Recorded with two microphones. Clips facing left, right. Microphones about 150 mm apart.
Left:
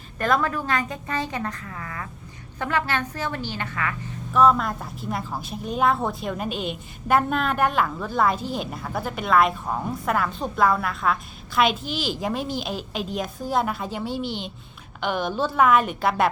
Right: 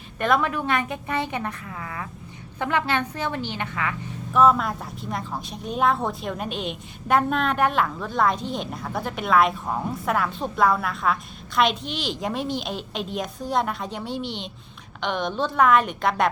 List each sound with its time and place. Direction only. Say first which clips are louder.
0.2 s a woman's voice: right 1 dB; centre (ahead or behind)
0.8 s a woman's voice: right 1 dB; 20° right (ahead or behind)
4.3 s a woman's voice: even; centre (ahead or behind)